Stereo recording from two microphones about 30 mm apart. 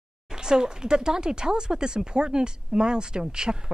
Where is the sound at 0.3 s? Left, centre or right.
Right.